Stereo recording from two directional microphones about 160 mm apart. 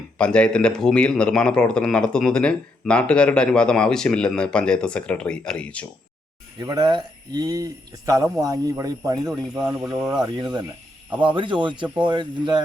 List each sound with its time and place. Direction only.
0.2 s a man's voice: 5° left (ahead or behind)
6.6 s speech: 25° right (ahead or behind)